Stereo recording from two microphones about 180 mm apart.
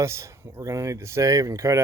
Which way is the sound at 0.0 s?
15° right (ahead or behind).